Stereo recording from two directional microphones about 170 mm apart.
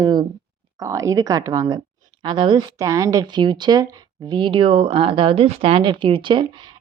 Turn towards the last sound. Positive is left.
turn(degrees=-30)  # may be behind; listen again after turning